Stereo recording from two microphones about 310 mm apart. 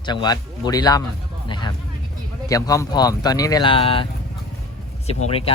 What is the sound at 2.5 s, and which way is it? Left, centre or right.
Speech, centre.